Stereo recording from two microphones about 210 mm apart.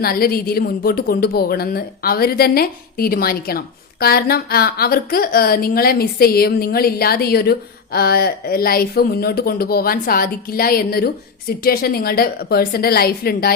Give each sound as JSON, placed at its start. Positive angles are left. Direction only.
{"t": 0.0, "sound": "speech", "side_deg": 45}